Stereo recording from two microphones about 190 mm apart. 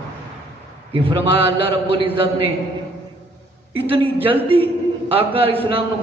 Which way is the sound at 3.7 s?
30° right (ahead or behind).